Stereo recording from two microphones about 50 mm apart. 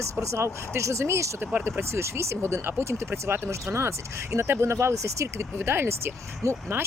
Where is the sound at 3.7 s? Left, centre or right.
Right.